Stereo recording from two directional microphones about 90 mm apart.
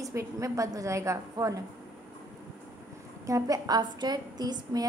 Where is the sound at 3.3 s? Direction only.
45° right (ahead or behind).